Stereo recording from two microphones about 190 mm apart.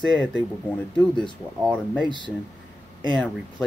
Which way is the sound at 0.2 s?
5° left (ahead or behind).